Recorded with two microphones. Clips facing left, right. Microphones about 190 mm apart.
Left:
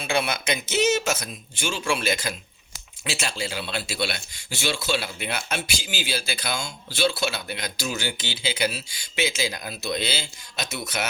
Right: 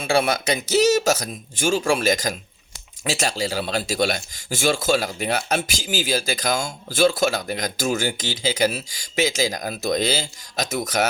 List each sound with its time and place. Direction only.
0.0 s speech: 40° right (ahead or behind)